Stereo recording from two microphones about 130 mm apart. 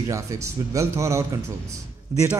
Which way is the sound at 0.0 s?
25° right (ahead or behind).